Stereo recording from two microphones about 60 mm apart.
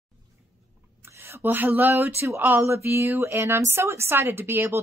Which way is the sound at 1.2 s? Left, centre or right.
Right.